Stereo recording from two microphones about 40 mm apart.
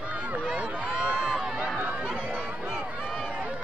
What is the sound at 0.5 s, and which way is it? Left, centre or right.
Speech, right.